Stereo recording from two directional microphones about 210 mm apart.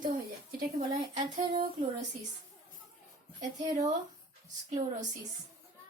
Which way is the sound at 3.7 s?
35° right (ahead or behind).